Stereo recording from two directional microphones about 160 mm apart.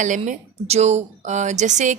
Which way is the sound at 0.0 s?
50° right (ahead or behind).